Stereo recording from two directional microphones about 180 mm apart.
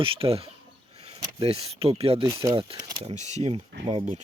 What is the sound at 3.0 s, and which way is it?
Speech, 35° right (ahead or behind).